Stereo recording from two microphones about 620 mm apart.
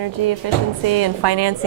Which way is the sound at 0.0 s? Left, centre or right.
Right.